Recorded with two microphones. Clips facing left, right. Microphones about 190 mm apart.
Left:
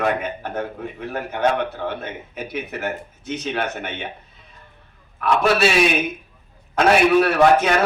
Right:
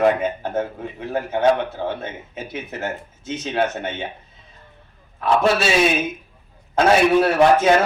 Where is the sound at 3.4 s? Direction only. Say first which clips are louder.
Right 4 dB; 25° right (ahead or behind).